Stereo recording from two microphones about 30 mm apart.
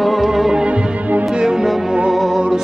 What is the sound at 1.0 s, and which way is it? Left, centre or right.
Music, right.